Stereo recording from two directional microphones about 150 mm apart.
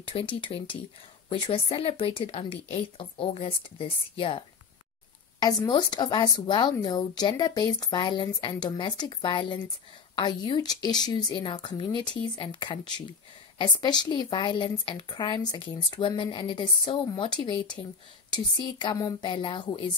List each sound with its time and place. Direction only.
0.0 s a woman's voice: 35° left (ahead or behind)